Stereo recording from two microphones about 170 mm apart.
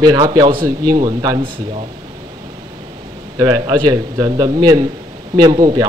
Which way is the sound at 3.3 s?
25° right (ahead or behind).